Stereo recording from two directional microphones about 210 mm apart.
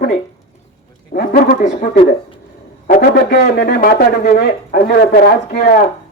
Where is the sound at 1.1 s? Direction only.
40° left (ahead or behind).